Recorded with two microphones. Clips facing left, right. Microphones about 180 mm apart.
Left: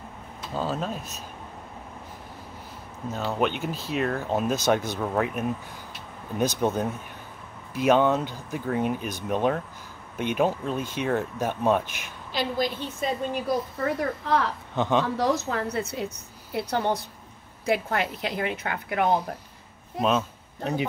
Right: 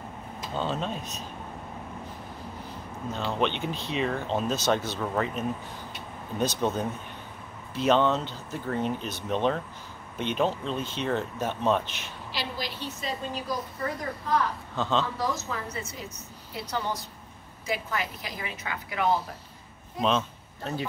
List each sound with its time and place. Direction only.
0.6 s speech: 5° left (ahead or behind)
3.1 s speech: 5° left (ahead or behind)
12.4 s a woman's voice: 50° left (ahead or behind)
13.9 s a woman's voice: 70° left (ahead or behind)
14.8 s speech: 15° left (ahead or behind)
15.1 s a woman's voice: 70° left (ahead or behind)
20.0 s speech: 5° left (ahead or behind)
20.6 s speech: 15° left (ahead or behind)